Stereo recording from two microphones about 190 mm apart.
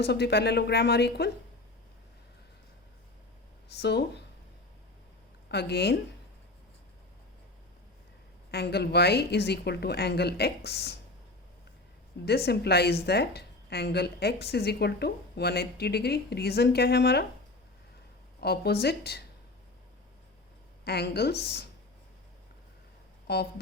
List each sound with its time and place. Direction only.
0.0 s speech: 60° left (ahead or behind)
3.7 s speech: 60° left (ahead or behind)
5.5 s speech: 60° left (ahead or behind)
8.4 s speech: 60° left (ahead or behind)
12.5 s speech: 60° left (ahead or behind)
18.3 s speech: 60° left (ahead or behind)
20.8 s speech: 55° left (ahead or behind)
23.2 s speech: 55° left (ahead or behind)